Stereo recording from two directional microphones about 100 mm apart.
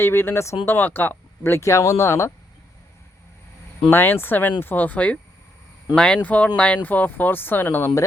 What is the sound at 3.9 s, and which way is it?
Speech, 20° left (ahead or behind).